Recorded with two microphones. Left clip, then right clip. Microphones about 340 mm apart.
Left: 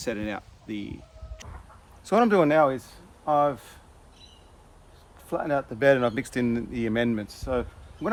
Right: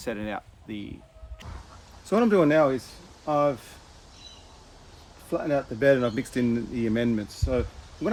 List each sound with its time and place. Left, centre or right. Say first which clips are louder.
0.0 s speech: left 1 dB; centre
2.0 s speech: left 1 dB; centre
5.3 s speech: even; centre